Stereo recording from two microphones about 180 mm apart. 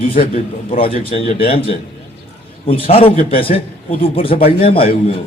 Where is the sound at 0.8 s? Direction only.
30° left (ahead or behind).